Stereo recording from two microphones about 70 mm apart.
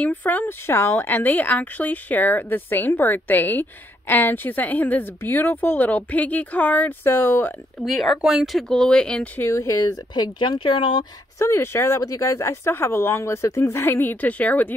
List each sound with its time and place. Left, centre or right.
0.0 s speech: left
7.1 s speech: left
7.8 s speech: centre
8.2 s speech: centre
8.5 s speech: centre
9.4 s speech: left
10.1 s speech: left
11.3 s speech: left
12.0 s speech: left